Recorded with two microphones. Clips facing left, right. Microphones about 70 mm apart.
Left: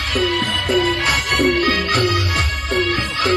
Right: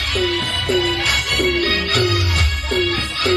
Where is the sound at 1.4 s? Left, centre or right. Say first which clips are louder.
Left 2 dB; left.